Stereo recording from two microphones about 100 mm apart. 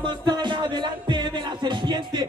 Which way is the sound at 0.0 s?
50° right (ahead or behind).